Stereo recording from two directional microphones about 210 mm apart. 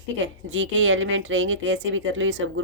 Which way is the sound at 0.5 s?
65° right (ahead or behind).